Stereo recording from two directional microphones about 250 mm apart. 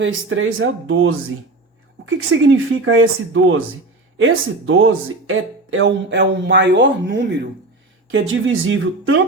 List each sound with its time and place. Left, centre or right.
0.0 s speech: right